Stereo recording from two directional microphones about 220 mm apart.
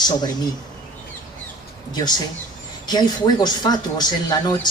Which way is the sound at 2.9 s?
20° left (ahead or behind).